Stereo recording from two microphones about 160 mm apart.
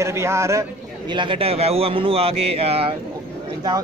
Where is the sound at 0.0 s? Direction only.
15° right (ahead or behind); by 2.9 s 40° right (ahead or behind).